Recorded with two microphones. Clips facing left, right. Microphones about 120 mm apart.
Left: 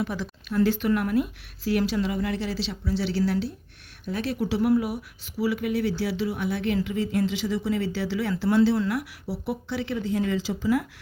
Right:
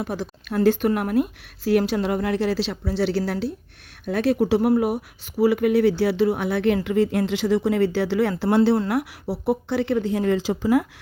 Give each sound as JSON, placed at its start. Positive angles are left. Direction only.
{"t": 0.0, "sound": "speech", "side_deg": -45}